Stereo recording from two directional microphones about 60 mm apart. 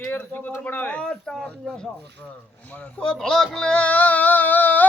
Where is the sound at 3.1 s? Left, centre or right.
Centre; by 4.9 s left.